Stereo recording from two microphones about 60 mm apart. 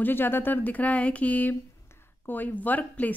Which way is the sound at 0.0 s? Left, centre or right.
Left.